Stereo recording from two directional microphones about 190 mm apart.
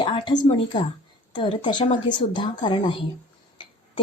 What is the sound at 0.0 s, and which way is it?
Speech, 25° left (ahead or behind).